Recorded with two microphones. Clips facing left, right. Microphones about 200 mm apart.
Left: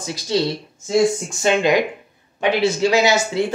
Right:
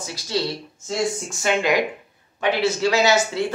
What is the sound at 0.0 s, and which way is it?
Speech, 20° left (ahead or behind).